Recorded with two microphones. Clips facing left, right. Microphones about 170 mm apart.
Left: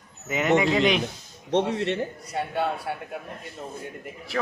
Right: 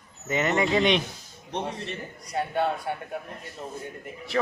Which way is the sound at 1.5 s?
80° left.